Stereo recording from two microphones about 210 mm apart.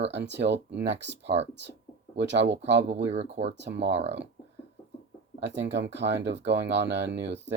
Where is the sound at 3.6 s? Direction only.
55° right (ahead or behind).